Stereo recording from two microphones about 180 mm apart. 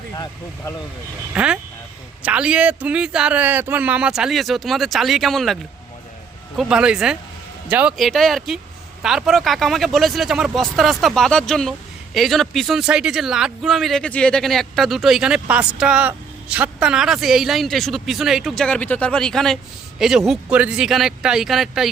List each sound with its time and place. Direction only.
1.3 s speech: 5° right (ahead or behind)
6.6 s speech: 5° right (ahead or behind)